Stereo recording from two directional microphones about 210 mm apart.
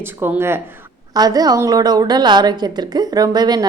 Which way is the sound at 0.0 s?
10° right (ahead or behind).